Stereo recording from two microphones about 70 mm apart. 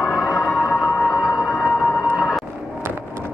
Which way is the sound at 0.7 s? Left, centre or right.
Left.